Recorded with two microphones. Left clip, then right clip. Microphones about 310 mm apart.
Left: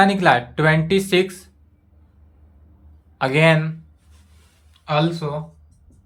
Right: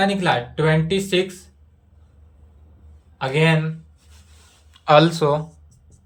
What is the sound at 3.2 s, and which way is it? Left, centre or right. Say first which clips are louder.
Speech: left 3 dB; centre.